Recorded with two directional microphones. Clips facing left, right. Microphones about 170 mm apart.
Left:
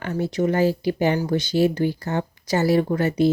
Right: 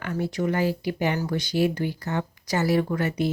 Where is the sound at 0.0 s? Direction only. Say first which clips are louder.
Left 4 dB; 25° left (ahead or behind).